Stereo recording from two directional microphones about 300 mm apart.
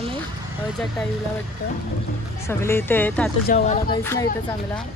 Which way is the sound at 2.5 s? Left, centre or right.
Centre.